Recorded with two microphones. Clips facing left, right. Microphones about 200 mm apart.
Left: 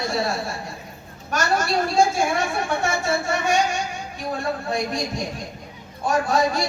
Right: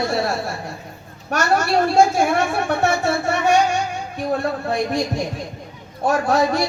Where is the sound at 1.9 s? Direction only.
65° right (ahead or behind).